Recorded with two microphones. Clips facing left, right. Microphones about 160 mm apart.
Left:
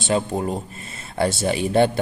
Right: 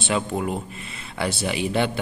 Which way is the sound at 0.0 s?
35° left (ahead or behind).